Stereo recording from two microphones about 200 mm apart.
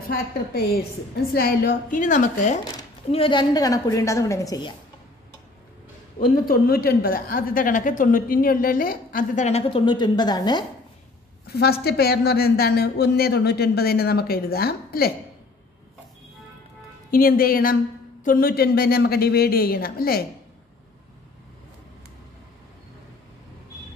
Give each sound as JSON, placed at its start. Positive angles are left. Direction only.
{"t": 0.1, "sound": "a woman's voice", "side_deg": 50}
{"t": 2.6, "sound": "a woman's voice", "side_deg": 25}
{"t": 6.1, "sound": "a woman's voice", "side_deg": 45}
{"t": 11.4, "sound": "a woman's voice", "side_deg": 50}
{"t": 17.1, "sound": "a woman's voice", "side_deg": 45}